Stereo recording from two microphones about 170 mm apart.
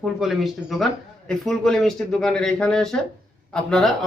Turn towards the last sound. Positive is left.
turn(degrees=5)  # may be behind; listen again after turning